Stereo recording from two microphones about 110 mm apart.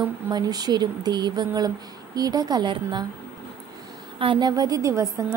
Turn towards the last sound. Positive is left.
turn(degrees=-30)  # may be behind; listen again after turning